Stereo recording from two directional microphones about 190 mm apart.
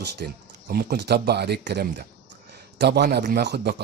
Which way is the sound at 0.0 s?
55° right (ahead or behind).